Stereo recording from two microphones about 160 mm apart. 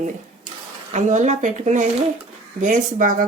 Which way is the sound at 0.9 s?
50° right (ahead or behind).